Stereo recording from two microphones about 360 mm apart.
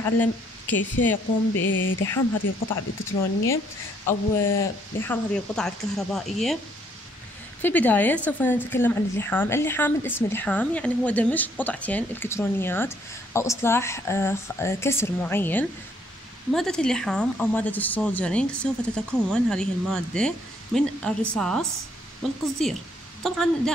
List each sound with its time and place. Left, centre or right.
0.0 s speech: centre
1.5 s speech: left
2.3 s speech: left
4.4 s a woman's voice: centre
7.6 s a woman's voice: centre
23.2 s a woman's voice: centre